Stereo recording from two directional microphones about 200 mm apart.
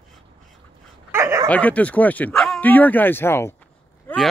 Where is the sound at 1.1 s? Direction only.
15° right (ahead or behind).